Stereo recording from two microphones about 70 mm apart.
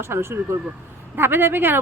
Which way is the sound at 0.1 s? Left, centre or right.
Right.